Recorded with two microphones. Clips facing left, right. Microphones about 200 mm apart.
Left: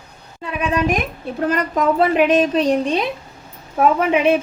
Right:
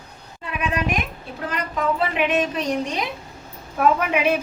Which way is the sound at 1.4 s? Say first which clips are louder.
Left 6 dB; 45° left (ahead or behind).